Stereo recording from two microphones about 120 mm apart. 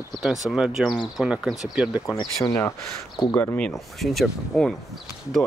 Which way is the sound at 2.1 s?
35° left (ahead or behind).